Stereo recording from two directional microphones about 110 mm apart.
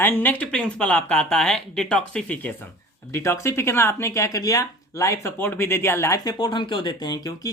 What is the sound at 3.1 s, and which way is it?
Speech, 25° left (ahead or behind).